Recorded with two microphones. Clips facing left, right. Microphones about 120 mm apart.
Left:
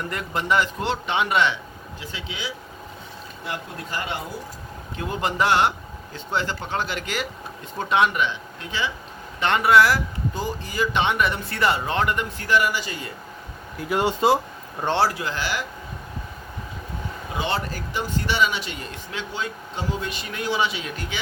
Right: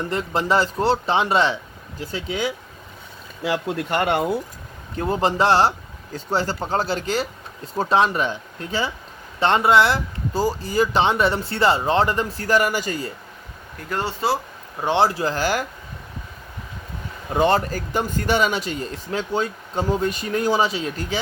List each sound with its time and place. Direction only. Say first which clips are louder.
0.0 s speech: right 5 dB; 30° right (ahead or behind)
3.4 s speech: right 10 dB; 80° right; by 4.4 s 60° right (ahead or behind)
4.9 s speech: right 4 dB; 35° right (ahead or behind)
13.7 s speech: left 4 dB; 10° left (ahead or behind)
14.8 s speech: right 2 dB; centre (ahead or behind)
15.1 s speech: right 6 dB; 35° right (ahead or behind)
17.3 s speech: right 8 dB; 45° right (ahead or behind)